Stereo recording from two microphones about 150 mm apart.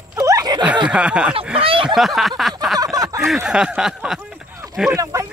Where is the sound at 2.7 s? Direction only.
20° right (ahead or behind).